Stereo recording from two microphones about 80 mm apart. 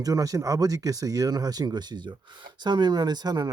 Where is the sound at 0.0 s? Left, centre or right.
Right.